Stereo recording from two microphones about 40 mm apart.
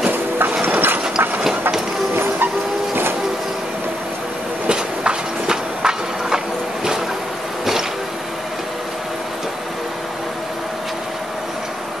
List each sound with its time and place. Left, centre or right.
0.1 s a sound: right
2.1 s music: right
4.6 s train: right